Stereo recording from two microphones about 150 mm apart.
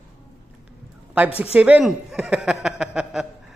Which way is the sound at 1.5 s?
10° right (ahead or behind).